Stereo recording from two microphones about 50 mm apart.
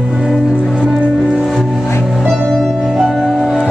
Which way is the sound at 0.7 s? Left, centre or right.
Centre.